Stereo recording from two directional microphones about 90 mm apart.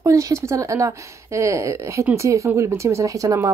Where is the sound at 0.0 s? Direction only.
35° right (ahead or behind).